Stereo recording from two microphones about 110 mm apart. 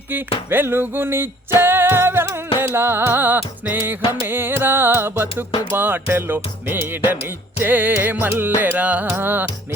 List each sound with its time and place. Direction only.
0.5 s music: 20° right (ahead or behind)
8.6 s carnatic music: 15° right (ahead or behind)
9.0 s music: 20° right (ahead or behind)